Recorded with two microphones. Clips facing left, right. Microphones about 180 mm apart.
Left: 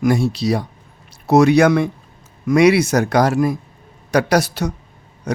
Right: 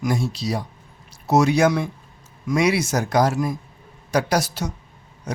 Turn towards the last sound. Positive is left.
turn(degrees=65)  # may be behind; listen again after turning